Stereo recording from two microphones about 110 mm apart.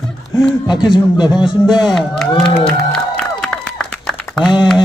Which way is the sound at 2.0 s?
5° left (ahead or behind).